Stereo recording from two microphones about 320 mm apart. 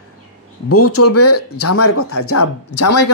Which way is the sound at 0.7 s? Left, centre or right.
Left.